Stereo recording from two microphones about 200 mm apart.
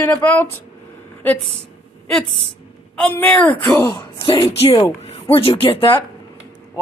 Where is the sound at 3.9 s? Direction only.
25° left (ahead or behind).